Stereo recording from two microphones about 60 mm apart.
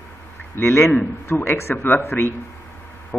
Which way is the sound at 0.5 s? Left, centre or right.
Left.